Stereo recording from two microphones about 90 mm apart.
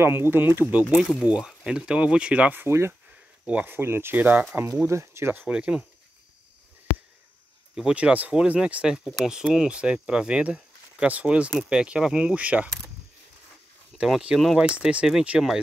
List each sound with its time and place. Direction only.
0.0 s speech: 25° right (ahead or behind)
1.0 s speech: 5° right (ahead or behind)
4.8 s speech: 30° right (ahead or behind)
5.5 s speech: 10° right (ahead or behind)
7.7 s speech: 10° right (ahead or behind)
13.9 s speech: 5° right (ahead or behind)